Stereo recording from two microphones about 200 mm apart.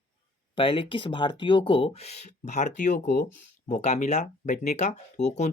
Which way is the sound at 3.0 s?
50° left (ahead or behind).